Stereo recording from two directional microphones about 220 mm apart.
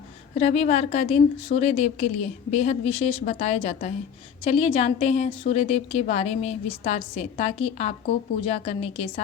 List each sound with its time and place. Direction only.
0.3 s a woman's voice: 30° left (ahead or behind)